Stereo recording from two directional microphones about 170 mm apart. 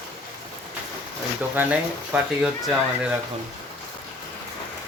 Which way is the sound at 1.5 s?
5° right (ahead or behind).